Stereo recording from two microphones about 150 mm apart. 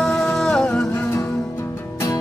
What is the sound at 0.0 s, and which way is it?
Music, 5° left (ahead or behind).